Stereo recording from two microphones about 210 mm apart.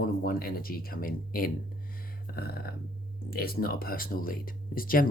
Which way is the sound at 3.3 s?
45° left (ahead or behind).